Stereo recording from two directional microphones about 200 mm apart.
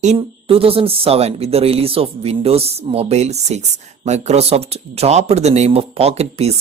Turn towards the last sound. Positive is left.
turn(degrees=-30)  # may be behind; listen again after turning